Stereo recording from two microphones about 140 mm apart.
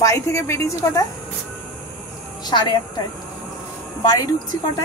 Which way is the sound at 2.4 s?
30° left (ahead or behind).